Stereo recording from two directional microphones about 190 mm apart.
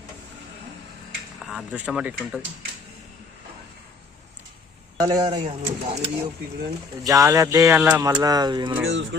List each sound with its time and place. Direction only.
1.4 s speech: 5° right (ahead or behind)
4.9 s speech: 20° right (ahead or behind)